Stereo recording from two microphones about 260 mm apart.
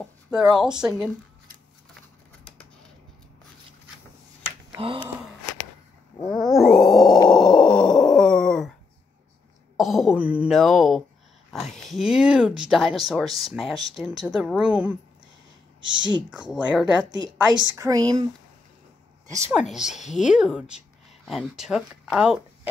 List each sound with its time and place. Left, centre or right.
0.3 s speech: centre
4.7 s a sound: centre
6.2 s grunt: centre
7.2 s a sound: centre
9.8 s speech: centre
16.0 s speech: centre
16.3 s speech: centre
17.7 s speech: centre
19.3 s speech: centre